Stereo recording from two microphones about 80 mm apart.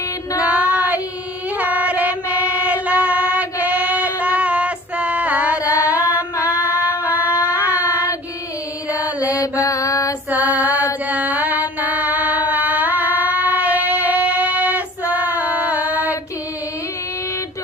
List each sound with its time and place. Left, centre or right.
0.4 s child singing: centre
1.5 s music: right
6.5 s female singing: right
6.7 s a sound: left
7.1 s a sound: centre
7.6 s child singing: right
8.9 s mantra: centre
9.3 s mantra: left
10.2 s female singing: centre
11.1 s music: centre